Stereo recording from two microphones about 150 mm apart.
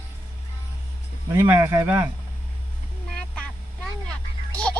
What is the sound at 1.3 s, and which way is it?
Speech, 20° right (ahead or behind).